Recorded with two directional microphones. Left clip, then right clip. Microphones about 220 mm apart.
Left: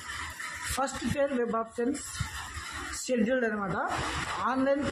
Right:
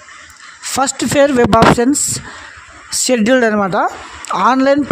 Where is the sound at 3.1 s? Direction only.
50° right (ahead or behind).